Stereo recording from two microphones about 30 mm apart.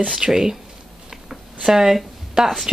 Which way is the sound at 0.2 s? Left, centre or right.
Centre.